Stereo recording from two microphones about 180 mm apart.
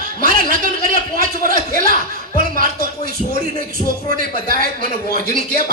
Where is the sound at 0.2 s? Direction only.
50° right (ahead or behind).